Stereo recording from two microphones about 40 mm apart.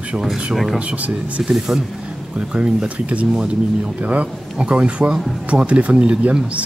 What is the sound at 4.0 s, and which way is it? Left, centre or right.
Speech, right.